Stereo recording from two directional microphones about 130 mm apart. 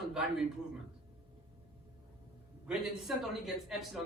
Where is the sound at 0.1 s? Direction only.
5° right (ahead or behind).